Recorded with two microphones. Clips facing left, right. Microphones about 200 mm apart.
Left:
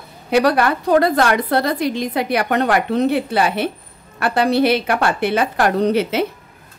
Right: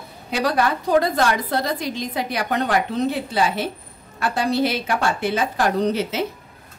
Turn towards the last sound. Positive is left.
turn(degrees=60)  # may be behind; listen again after turning